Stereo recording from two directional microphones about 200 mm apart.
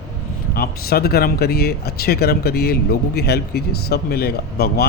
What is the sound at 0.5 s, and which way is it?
Speech, 50° left (ahead or behind).